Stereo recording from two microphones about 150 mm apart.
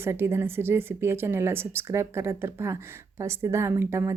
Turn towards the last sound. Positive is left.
turn(degrees=-15)  # may be behind; listen again after turning